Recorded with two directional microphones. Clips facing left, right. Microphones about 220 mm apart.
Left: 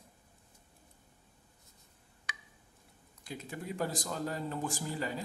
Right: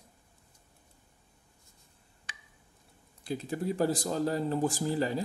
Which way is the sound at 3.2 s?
35° right (ahead or behind).